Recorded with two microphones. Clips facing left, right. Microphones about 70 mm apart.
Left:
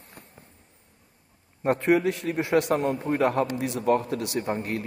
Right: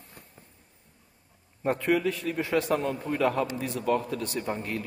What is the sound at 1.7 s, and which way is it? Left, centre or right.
Speech, left.